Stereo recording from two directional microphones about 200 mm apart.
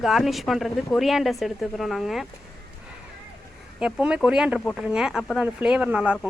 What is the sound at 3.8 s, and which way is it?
Speech, 5° right (ahead or behind).